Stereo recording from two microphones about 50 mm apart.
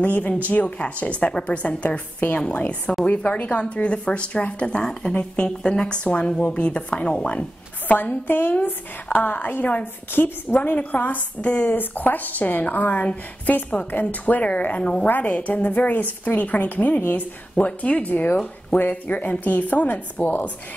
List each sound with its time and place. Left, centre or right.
0.0 s a woman's voice: left
2.4 s speech: left
5.1 s speech: left
5.6 s speech: centre
8.3 s a woman's voice: left
11.7 s a woman's voice: left
18.1 s a woman's voice: left